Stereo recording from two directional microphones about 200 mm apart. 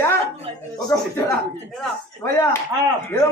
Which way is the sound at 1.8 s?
10° left (ahead or behind).